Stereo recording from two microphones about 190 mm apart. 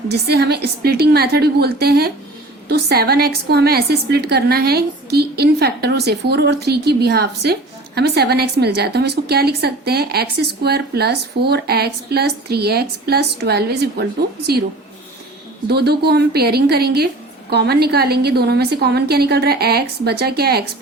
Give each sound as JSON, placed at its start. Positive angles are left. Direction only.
{"t": 0.1, "sound": "a woman's voice", "side_deg": -60}
{"t": 15.7, "sound": "a woman's voice", "side_deg": -55}